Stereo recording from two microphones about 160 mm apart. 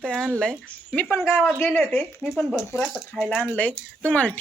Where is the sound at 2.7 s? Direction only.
15° left (ahead or behind).